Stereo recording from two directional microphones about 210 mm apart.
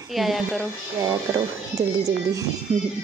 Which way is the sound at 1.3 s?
15° right (ahead or behind).